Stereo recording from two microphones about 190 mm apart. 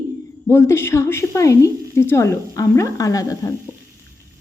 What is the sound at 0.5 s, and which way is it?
A woman's voice, 15° left (ahead or behind).